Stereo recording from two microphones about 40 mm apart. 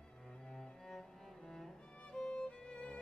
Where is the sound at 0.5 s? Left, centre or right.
Centre.